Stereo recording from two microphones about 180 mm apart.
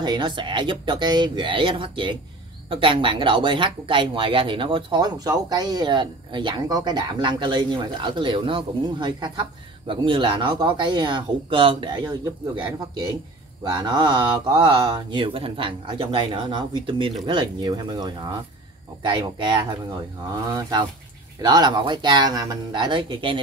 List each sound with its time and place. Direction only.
0.0 s speech: 25° right (ahead or behind)